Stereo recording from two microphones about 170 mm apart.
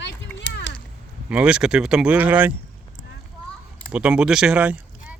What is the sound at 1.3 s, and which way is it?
Speech, 5° right (ahead or behind).